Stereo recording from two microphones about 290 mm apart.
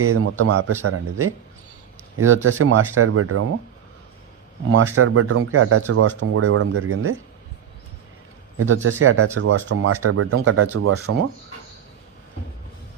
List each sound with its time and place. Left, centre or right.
0.0 s speech: right
4.9 s speech: right
8.5 s speech: right